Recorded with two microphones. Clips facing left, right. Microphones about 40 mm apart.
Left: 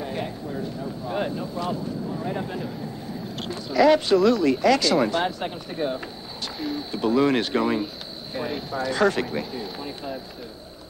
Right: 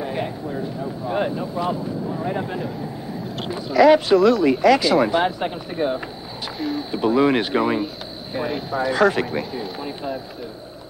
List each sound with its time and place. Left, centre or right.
0.0 s vehicle: centre
3.3 s a sound: centre
3.7 s speech: centre
6.6 s speech: centre
6.9 s speech: centre